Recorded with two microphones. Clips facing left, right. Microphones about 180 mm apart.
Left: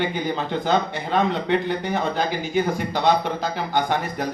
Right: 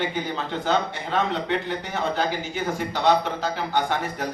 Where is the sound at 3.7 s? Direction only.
15° left (ahead or behind).